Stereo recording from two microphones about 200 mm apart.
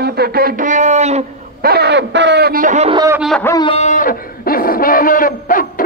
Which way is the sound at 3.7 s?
35° left (ahead or behind).